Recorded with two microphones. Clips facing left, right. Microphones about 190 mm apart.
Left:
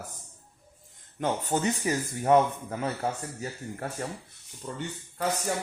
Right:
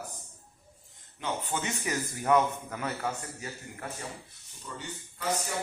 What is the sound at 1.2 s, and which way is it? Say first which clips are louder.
A man's voice: left 6 dB; 40° left (ahead or behind).